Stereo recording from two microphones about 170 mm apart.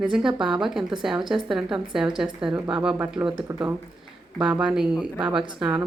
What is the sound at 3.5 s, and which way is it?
Speech, 20° right (ahead or behind).